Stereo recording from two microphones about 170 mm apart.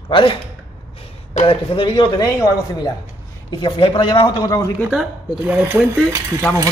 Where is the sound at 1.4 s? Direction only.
35° left (ahead or behind).